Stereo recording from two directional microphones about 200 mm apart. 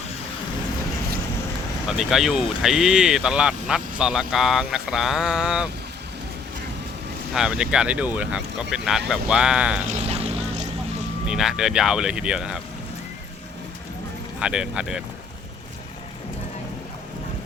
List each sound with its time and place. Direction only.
2.0 s speech: centre (ahead or behind)
7.3 s speech: 5° right (ahead or behind)
9.8 s boat: 35° right (ahead or behind)
11.3 s speech: centre (ahead or behind)
14.3 s speech: 5° right (ahead or behind)